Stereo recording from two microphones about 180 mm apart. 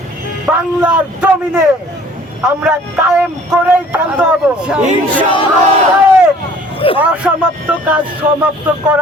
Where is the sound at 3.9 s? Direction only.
5° right (ahead or behind).